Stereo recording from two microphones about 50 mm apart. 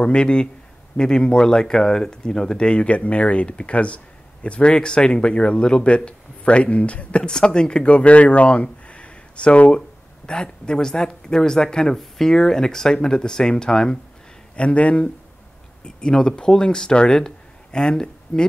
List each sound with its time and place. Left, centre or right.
0.0 s speech: centre